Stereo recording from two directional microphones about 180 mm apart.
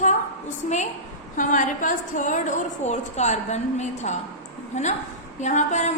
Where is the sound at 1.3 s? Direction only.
45° left (ahead or behind).